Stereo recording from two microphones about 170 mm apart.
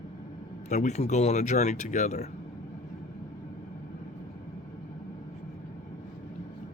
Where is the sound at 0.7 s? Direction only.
45° left (ahead or behind).